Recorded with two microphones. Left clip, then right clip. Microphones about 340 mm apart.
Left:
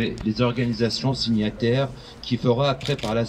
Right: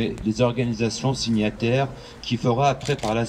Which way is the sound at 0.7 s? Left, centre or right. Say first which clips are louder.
Left 1 dB; centre.